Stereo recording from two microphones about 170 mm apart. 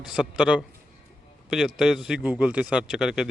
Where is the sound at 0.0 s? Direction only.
5° right (ahead or behind).